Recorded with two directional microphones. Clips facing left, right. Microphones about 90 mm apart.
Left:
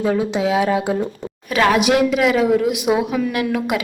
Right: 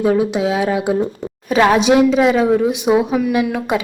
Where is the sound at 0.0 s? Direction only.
20° right (ahead or behind).